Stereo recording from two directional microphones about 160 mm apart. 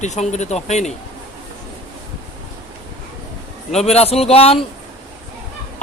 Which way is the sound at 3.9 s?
40° left (ahead or behind).